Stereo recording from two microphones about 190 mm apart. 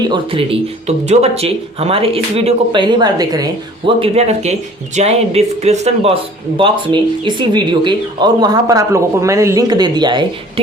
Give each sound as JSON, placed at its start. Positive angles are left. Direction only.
{"t": 0.0, "sound": "speech", "side_deg": -25}
{"t": 0.9, "sound": "speech", "side_deg": -35}